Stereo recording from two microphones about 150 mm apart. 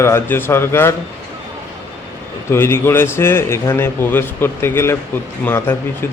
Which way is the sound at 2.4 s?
15° left (ahead or behind).